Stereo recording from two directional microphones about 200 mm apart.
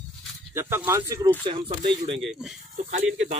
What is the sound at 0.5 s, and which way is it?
Speech, 10° right (ahead or behind).